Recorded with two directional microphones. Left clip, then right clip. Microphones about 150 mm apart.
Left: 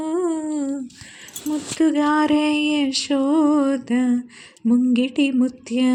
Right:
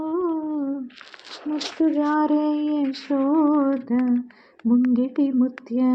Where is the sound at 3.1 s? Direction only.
35° left (ahead or behind).